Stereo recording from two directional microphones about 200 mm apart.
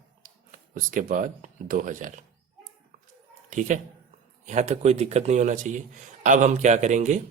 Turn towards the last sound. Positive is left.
turn(degrees=-35)  # may be behind; listen again after turning